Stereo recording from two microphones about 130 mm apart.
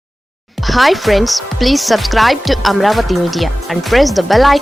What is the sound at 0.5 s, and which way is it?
Speech, centre (ahead or behind).